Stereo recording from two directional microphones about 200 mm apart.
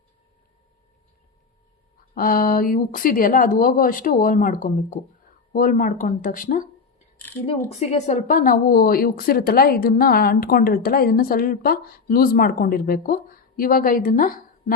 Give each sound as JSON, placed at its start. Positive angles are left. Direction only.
{"t": 2.1, "sound": "speech", "side_deg": 45}